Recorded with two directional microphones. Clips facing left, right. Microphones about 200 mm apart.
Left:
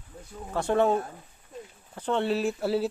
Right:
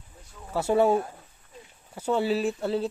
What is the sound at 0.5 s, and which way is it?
Speech, 10° right (ahead or behind).